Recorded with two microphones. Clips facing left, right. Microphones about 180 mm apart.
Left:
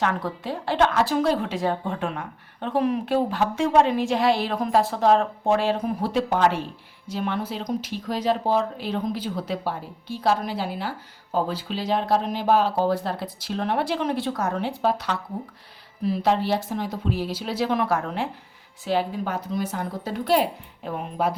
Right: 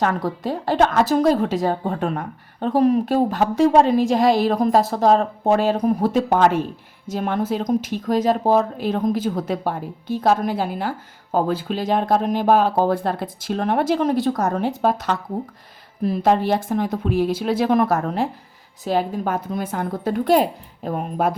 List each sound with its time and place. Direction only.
0.0 s a woman's voice: 40° right (ahead or behind)